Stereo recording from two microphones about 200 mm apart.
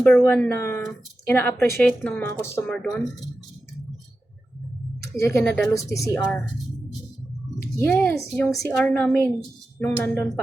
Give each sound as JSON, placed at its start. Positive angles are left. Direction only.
{"t": 0.0, "sound": "speech", "side_deg": 10}
{"t": 2.7, "sound": "speech", "side_deg": 0}
{"t": 5.1, "sound": "speech", "side_deg": 15}
{"t": 7.9, "sound": "speech", "side_deg": 10}